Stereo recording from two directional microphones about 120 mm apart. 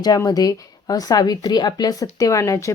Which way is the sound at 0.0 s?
35° left (ahead or behind).